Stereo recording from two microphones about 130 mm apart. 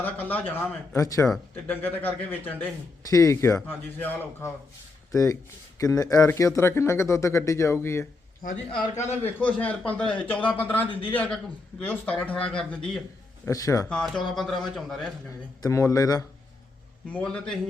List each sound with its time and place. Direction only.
0.0 s a man's voice: 15° left (ahead or behind)
0.9 s speech: 25° left (ahead or behind)
1.6 s a man's voice: 15° left (ahead or behind)
3.0 s speech: 25° left (ahead or behind)
8.4 s a man's voice: 90° left
9.0 s a man's voice: 60° left (ahead or behind)
9.4 s a man's voice: 10° left (ahead or behind)
13.4 s speech: 25° left (ahead or behind)
13.8 s speech: 5° left (ahead or behind)
15.6 s speech: 25° left (ahead or behind)
17.1 s a man's voice: 10° left (ahead or behind)